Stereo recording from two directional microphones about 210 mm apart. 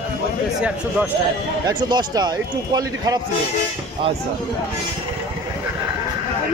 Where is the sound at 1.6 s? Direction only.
20° right (ahead or behind).